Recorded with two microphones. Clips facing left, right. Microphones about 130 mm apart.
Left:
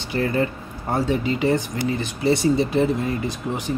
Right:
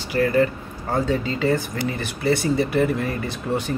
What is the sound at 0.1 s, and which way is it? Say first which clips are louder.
Speech: right 3 dB; 25° left (ahead or behind).